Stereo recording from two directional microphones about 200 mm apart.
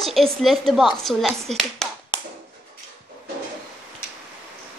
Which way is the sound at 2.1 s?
25° left (ahead or behind).